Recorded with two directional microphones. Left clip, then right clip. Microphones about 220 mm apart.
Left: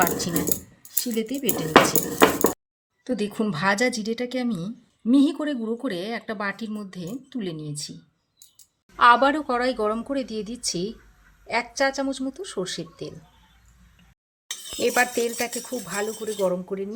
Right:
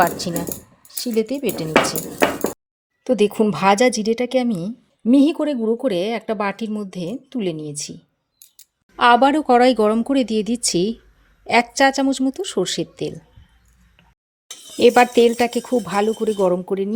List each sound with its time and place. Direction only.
0.0 s speech: 25° right (ahead or behind)
3.1 s speech: 30° right (ahead or behind)
9.0 s speech: 25° right (ahead or behind)
14.8 s speech: 35° right (ahead or behind)